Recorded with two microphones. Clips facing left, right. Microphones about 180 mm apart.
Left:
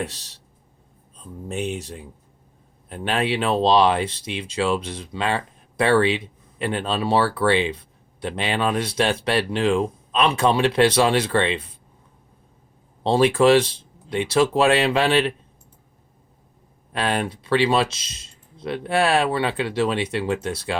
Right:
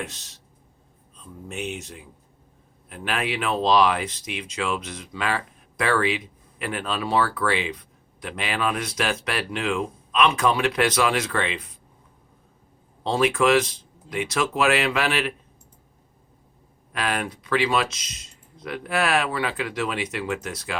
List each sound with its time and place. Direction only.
0.0 s speech: 35° left (ahead or behind)
13.0 s speech: 30° left (ahead or behind)
16.9 s speech: 30° left (ahead or behind)